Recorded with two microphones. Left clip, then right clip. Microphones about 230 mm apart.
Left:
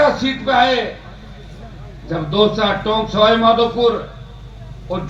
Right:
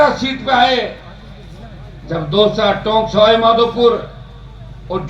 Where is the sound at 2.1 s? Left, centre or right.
Right.